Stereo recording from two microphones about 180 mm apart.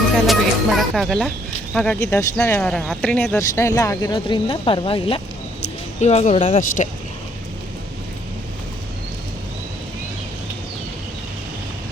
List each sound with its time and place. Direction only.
0.3 s speech: centre (ahead or behind)
3.3 s speech: 15° left (ahead or behind); by 6.9 s 40° left (ahead or behind)